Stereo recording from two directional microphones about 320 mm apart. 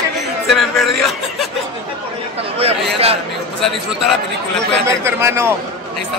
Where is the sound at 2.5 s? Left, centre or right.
Centre.